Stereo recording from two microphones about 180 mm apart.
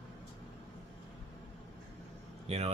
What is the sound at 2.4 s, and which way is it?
Speech, 35° right (ahead or behind).